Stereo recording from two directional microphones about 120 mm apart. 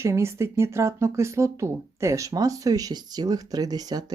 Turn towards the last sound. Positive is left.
turn(degrees=-35)  # may be behind; listen again after turning